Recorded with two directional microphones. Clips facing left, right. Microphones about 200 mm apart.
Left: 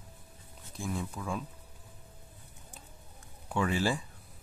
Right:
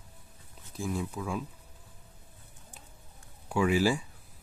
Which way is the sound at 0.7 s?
5° right (ahead or behind).